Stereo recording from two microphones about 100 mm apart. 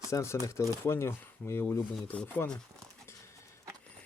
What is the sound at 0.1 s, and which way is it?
Speech, 30° left (ahead or behind).